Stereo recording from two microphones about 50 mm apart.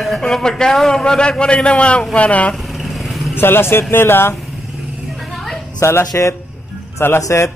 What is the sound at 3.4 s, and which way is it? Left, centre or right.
Speech, left.